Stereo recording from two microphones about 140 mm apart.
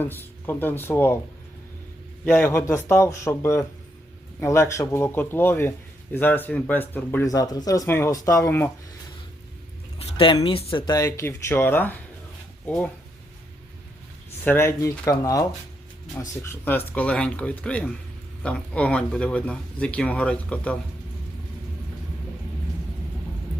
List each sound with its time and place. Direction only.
0.0 s speech: 15° left (ahead or behind)
2.2 s a man's voice: 15° left (ahead or behind)
7.3 s a man's voice: 25° left (ahead or behind)
10.0 s a sound: 35° left (ahead or behind)
10.3 s a man's voice: 35° left (ahead or behind); by 12.9 s 10° left (ahead or behind)
14.4 s a man's voice: 15° left (ahead or behind)